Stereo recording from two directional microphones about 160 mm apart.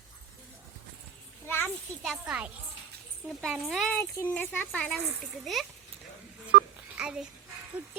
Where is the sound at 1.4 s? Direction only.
15° left (ahead or behind).